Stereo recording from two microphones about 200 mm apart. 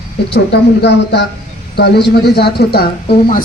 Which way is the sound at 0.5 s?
55° left (ahead or behind).